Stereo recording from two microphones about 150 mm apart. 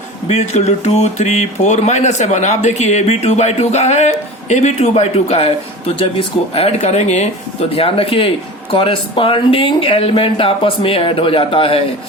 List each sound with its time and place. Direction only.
0.3 s speech: 50° left (ahead or behind)
7.8 s speech: 40° left (ahead or behind)